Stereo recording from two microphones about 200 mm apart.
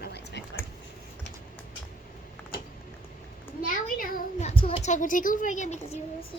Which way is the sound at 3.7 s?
45° left (ahead or behind).